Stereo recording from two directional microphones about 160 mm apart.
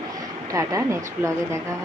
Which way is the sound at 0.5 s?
20° right (ahead or behind).